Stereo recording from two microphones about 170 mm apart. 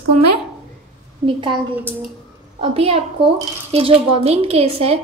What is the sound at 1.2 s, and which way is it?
Speech, 30° right (ahead or behind).